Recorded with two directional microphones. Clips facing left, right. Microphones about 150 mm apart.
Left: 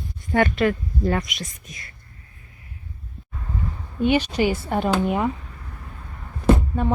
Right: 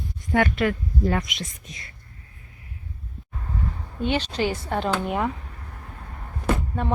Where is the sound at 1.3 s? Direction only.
25° right (ahead or behind).